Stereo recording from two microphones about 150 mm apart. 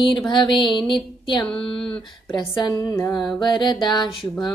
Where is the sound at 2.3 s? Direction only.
25° left (ahead or behind).